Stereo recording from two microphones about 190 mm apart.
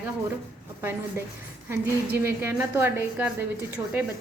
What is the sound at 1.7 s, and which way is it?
A woman's voice, 10° right (ahead or behind).